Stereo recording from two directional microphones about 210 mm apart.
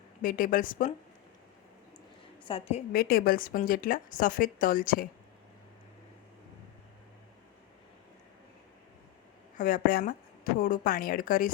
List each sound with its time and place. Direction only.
0.2 s a woman's voice: 40° left (ahead or behind)
2.4 s a woman's voice: 25° left (ahead or behind)
2.9 s a woman's voice: 45° left (ahead or behind)
9.6 s a woman's voice: 40° left (ahead or behind)